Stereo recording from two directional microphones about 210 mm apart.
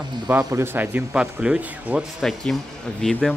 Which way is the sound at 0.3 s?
15° right (ahead or behind).